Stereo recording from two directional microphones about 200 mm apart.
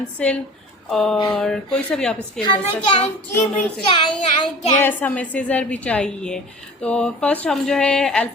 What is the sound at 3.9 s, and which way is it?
Speech, 25° left (ahead or behind).